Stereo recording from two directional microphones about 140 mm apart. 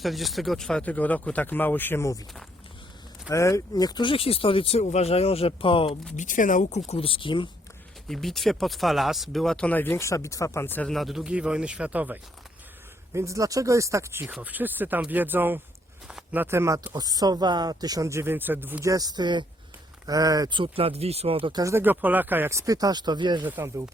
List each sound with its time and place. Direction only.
0.0 s speech: centre (ahead or behind); by 2.1 s 20° left (ahead or behind)
3.2 s speech: 20° left (ahead or behind); by 6.0 s 40° left (ahead or behind)
6.1 s speech: 70° left (ahead or behind); by 7.4 s 40° left (ahead or behind)
8.0 s speech: centre (ahead or behind)
10.9 s speech: centre (ahead or behind)
13.1 s speech: 20° right (ahead or behind); by 21.6 s 40° right (ahead or behind)
21.6 s speech: 20° right (ahead or behind); by 23.5 s 35° right (ahead or behind)
23.5 s speech: 20° right (ahead or behind)